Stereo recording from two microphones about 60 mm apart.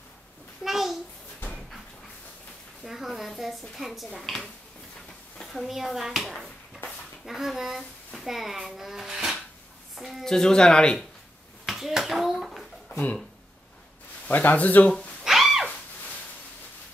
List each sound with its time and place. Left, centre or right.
0.7 s a sound: centre
2.8 s speech: centre
6.3 s a sound: centre
7.2 s a child's voice: centre
10.2 s speech: centre
11.6 s clapping: centre
14.2 s a man's voice: left
15.2 s music: centre